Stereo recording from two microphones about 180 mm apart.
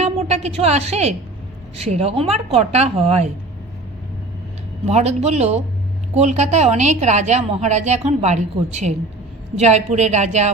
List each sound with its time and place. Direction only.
0.0 s a sound: 35° right (ahead or behind)
1.7 s a woman's voice: 35° right (ahead or behind)
4.9 s a woman's voice: 35° right (ahead or behind)